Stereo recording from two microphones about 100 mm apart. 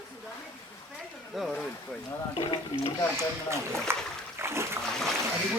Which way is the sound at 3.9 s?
25° right (ahead or behind).